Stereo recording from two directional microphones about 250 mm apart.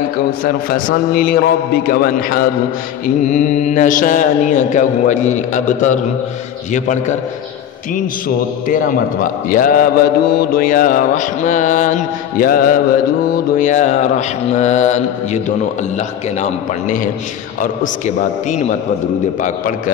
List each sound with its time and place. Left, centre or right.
0.4 s a man's voice: left
3.3 s mantra: left
8.6 s a man's voice: left
13.6 s mantra: left
17.6 s mantra: left